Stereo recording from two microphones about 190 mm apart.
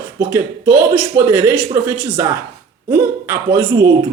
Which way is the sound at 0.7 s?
10° right (ahead or behind).